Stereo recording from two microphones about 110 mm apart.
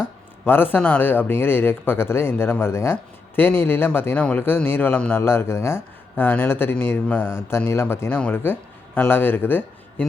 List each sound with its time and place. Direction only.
0.4 s speech: 20° left (ahead or behind)